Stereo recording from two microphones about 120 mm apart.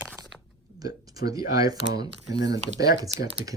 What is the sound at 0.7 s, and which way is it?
Speech, 30° right (ahead or behind).